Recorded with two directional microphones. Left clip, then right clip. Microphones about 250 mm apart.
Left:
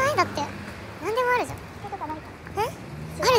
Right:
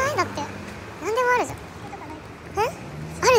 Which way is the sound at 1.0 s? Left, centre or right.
Centre.